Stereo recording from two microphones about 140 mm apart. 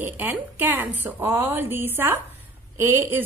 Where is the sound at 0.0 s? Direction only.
15° right (ahead or behind).